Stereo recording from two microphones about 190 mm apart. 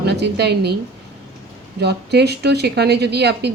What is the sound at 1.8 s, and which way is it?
Speech, 60° right (ahead or behind).